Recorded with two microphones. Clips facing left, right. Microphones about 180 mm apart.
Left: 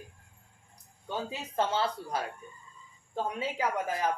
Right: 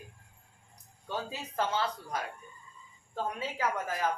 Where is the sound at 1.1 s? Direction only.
20° left (ahead or behind).